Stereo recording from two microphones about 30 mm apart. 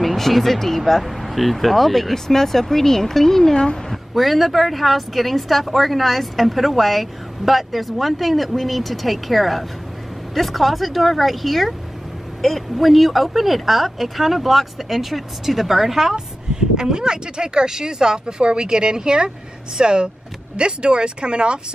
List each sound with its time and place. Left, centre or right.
0.0 s speech: centre
2.1 s a woman's voice: centre; by 21.5 s right